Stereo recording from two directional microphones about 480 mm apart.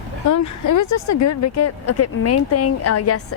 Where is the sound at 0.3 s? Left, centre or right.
Left.